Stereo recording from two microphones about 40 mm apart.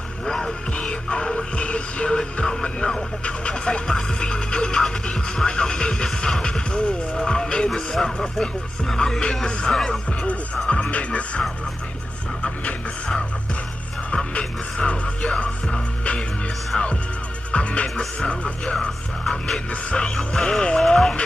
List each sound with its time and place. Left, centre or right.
0.2 s music: centre
0.7 s music: left
6.0 s music: centre
6.4 s music: left
7.7 s speech: centre
10.2 s music: left
12.4 s music: centre
17.9 s speech: left
18.8 s speech: centre
19.7 s speech: left